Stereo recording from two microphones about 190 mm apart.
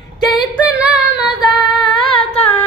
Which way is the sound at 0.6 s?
5° right (ahead or behind).